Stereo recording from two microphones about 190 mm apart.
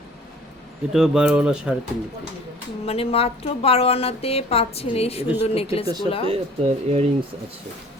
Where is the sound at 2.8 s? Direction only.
30° left (ahead or behind).